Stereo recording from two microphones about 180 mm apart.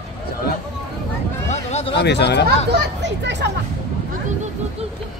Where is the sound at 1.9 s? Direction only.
70° left (ahead or behind).